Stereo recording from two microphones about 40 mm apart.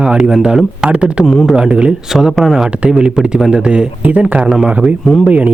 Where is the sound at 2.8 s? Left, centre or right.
Right.